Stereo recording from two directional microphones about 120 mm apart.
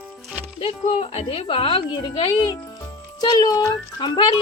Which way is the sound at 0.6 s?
50° left (ahead or behind).